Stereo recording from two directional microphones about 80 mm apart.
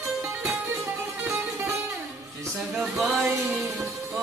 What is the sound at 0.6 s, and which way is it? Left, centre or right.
Music, right.